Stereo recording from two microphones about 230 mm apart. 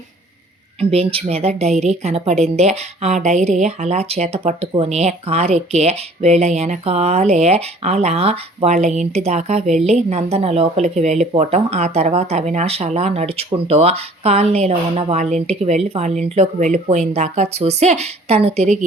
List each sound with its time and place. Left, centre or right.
0.8 s a woman's voice: right